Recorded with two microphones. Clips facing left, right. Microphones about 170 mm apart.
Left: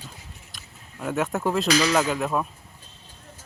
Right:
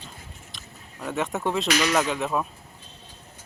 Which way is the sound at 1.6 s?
35° left (ahead or behind).